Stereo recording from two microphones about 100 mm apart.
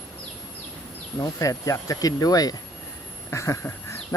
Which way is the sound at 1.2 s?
35° left (ahead or behind).